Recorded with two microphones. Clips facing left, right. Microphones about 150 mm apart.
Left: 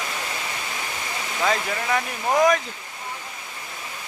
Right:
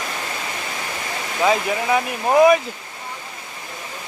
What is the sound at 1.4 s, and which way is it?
Speech, 15° right (ahead or behind).